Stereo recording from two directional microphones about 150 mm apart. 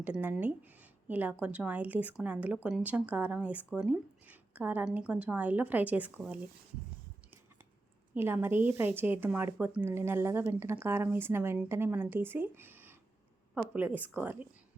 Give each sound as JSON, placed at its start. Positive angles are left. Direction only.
{"t": 0.0, "sound": "speech", "side_deg": -10}
{"t": 8.1, "sound": "speech", "side_deg": -15}
{"t": 12.5, "sound": "a sound", "side_deg": -15}
{"t": 13.5, "sound": "speech", "side_deg": -10}